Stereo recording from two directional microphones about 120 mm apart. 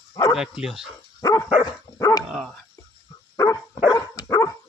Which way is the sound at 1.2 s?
30° left (ahead or behind).